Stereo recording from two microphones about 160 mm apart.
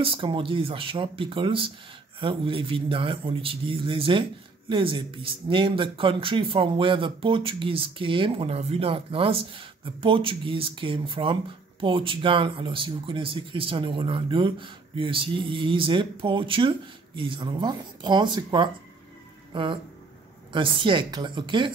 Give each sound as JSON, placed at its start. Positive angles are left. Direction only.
{"t": 0.0, "sound": "a man's voice", "side_deg": -35}